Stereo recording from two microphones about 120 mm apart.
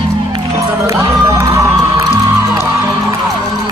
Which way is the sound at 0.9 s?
25° right (ahead or behind).